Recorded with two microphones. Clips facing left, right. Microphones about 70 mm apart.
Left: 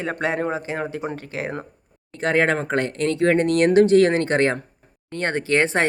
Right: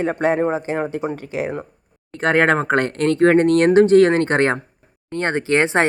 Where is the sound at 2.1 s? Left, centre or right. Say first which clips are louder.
Right 4 dB; right.